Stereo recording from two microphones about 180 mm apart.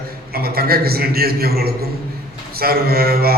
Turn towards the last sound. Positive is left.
turn(degrees=-60)  # may be behind; listen again after turning